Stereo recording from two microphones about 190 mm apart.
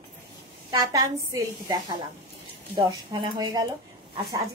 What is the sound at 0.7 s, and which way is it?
A woman's voice, 20° right (ahead or behind).